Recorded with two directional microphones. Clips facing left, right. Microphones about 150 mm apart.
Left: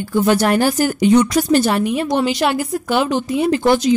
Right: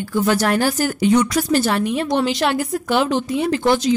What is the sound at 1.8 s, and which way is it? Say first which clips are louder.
Speech: left 2 dB; 5° left (ahead or behind).